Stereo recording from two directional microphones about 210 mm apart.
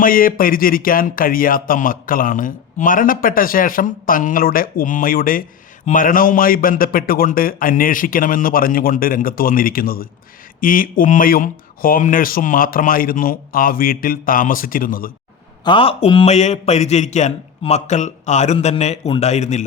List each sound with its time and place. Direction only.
0.0 s speech: 40° left (ahead or behind)
15.6 s speech: 25° left (ahead or behind)